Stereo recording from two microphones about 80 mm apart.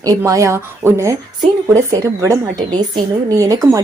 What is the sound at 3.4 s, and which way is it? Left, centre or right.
Speech, right.